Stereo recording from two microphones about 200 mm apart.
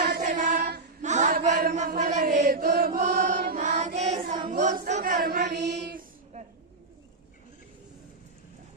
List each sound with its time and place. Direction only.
0.0 s choir: 55° right (ahead or behind)
0.3 s chant: 40° right (ahead or behind)
3.6 s child singing: 35° right (ahead or behind)
4.4 s choir: 30° right (ahead or behind)
5.1 s child singing: 50° right (ahead or behind)